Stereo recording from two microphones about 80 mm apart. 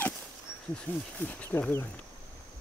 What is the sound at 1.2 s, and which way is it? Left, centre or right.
Speech, left.